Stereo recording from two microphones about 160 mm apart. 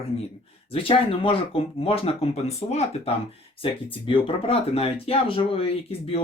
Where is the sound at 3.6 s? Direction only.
30° left (ahead or behind).